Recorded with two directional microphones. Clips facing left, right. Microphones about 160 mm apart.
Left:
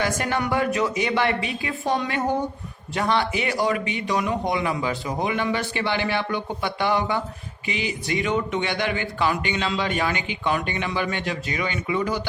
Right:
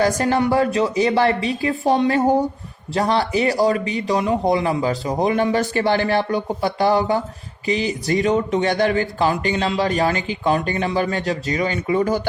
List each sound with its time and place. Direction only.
0.0 s speech: 35° right (ahead or behind)